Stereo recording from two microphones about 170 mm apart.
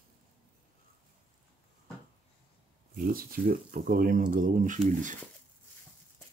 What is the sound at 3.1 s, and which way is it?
Speech, 60° right (ahead or behind).